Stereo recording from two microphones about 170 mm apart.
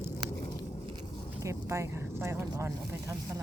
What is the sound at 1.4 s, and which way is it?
Speech, 15° right (ahead or behind).